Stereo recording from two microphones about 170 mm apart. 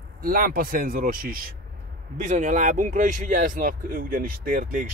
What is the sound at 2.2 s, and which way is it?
Speech, 45° right (ahead or behind).